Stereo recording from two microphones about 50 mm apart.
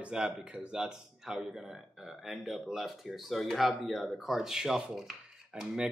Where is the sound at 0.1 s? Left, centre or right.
Centre.